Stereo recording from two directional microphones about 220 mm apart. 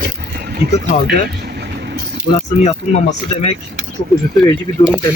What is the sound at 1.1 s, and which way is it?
Vehicle, 50° right (ahead or behind).